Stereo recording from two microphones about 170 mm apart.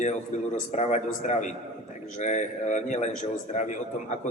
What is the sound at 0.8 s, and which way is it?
A man's voice, 45° left (ahead or behind).